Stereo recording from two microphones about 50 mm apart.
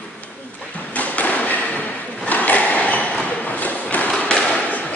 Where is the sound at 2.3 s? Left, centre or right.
Left.